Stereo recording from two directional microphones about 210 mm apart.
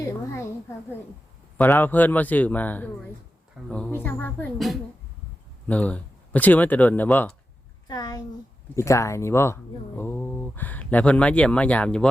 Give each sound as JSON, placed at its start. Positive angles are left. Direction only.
{"t": 1.5, "sound": "a child's voice", "side_deg": 10}